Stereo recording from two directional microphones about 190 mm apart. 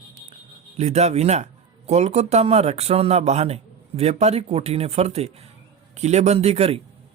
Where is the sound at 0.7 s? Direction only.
35° right (ahead or behind).